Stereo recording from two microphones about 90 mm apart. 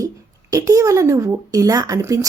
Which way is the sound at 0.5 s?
40° right (ahead or behind).